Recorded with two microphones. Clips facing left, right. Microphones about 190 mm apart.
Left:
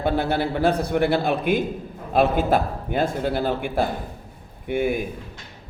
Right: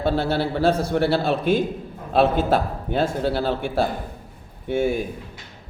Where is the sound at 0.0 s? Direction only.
15° left (ahead or behind).